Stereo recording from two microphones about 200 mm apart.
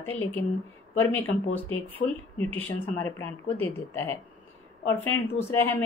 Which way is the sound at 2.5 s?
10° left (ahead or behind).